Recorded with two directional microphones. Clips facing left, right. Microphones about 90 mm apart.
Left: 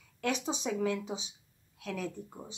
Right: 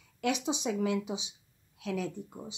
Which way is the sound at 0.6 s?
10° right (ahead or behind).